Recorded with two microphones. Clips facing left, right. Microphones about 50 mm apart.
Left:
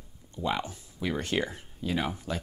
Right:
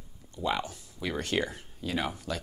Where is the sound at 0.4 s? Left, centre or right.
Centre.